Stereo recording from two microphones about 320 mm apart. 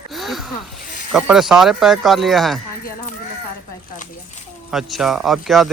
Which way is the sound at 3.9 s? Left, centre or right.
Left.